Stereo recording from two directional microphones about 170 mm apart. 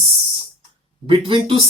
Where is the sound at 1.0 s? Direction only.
30° right (ahead or behind).